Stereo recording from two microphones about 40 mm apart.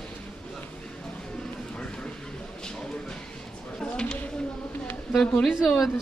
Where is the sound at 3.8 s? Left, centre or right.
Left.